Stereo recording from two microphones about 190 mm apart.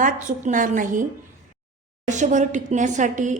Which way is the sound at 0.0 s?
40° right (ahead or behind).